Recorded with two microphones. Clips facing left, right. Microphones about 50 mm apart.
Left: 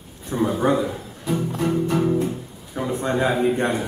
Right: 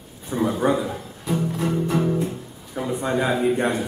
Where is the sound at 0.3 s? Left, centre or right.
Centre.